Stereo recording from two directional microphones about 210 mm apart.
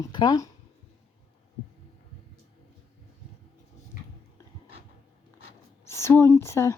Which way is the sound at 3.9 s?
40° left (ahead or behind).